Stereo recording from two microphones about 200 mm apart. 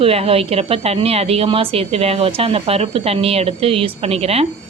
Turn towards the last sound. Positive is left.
turn(degrees=-30)  # may be behind; listen again after turning